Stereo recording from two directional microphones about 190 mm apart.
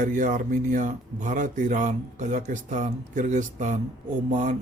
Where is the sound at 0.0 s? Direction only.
45° right (ahead or behind).